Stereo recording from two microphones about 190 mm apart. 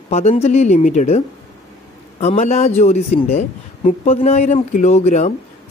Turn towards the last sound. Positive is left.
turn(degrees=35)  # may be behind; listen again after turning